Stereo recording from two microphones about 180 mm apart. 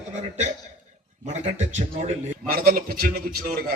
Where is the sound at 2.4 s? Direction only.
55° right (ahead or behind).